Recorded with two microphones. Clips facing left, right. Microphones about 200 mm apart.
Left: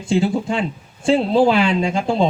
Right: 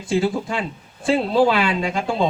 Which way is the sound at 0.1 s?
25° left (ahead or behind).